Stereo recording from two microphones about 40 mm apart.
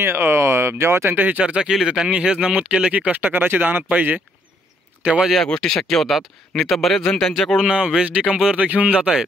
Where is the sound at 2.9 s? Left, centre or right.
Right.